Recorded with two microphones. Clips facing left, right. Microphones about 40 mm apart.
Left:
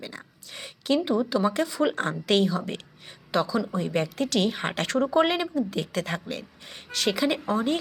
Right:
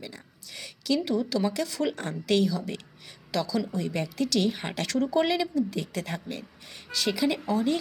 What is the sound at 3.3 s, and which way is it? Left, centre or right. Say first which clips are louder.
Speech: left 3 dB; left.